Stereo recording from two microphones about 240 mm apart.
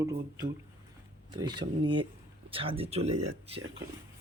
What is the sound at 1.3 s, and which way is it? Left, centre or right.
Speech, centre.